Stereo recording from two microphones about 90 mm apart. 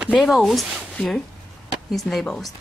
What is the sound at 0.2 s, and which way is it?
Speech, centre (ahead or behind).